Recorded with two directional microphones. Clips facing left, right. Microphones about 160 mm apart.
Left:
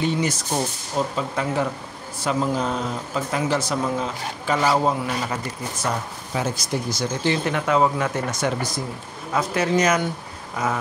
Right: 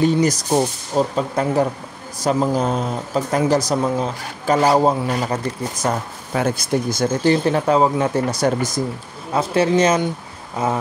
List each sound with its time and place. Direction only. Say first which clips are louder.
0.0 s speech: right 6 dB; 40° right (ahead or behind)
6.3 s speech: right 6 dB; 55° right (ahead or behind)
7.4 s speech: right 4 dB; 35° right (ahead or behind)
9.3 s a man's voice: right 4 dB; 30° right (ahead or behind)